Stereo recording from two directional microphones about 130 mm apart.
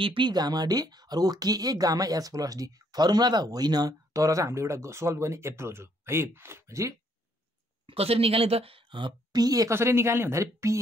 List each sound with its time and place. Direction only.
0.0 s speech: 40° right (ahead or behind); by 7.0 s 25° right (ahead or behind)
7.8 s a woman's voice: 45° right (ahead or behind); by 10.8 s 25° right (ahead or behind)